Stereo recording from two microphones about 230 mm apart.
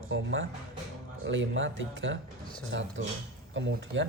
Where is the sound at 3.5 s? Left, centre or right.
Right.